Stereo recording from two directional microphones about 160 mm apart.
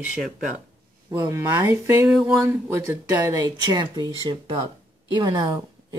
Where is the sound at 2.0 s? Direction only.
5° right (ahead or behind).